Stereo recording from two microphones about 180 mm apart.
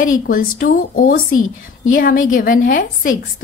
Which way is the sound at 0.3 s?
50° left (ahead or behind).